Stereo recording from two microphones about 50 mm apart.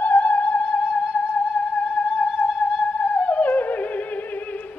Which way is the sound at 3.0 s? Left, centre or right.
Left.